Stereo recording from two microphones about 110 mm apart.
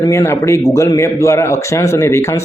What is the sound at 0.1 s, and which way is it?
Speech, 30° left (ahead or behind).